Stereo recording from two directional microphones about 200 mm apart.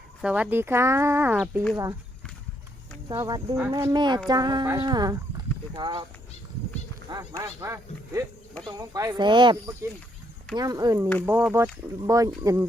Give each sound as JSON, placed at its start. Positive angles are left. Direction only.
{"t": 0.2, "sound": "speech", "side_deg": -5}
{"t": 3.1, "sound": "speech", "side_deg": -20}
{"t": 7.1, "sound": "speech", "side_deg": -15}